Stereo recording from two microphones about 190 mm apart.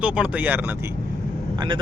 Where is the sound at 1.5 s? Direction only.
25° right (ahead or behind).